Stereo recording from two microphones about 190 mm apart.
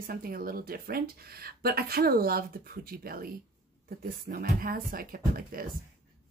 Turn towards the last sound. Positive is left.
turn(degrees=-50)  # may be behind; listen again after turning